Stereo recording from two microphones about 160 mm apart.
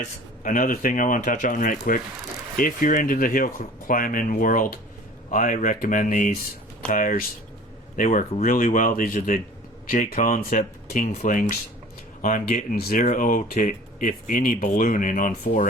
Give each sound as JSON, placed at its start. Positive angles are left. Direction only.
{"t": 0.0, "sound": "speech", "side_deg": 55}